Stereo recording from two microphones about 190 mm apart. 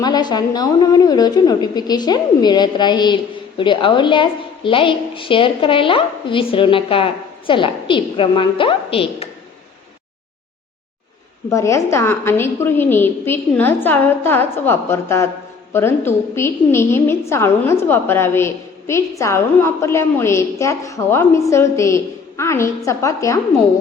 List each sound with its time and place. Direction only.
0.0 s a woman's voice: 20° left (ahead or behind)
11.4 s a woman's voice: 15° left (ahead or behind)